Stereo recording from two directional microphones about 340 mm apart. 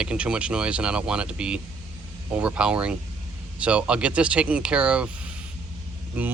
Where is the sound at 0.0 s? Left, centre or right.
Centre.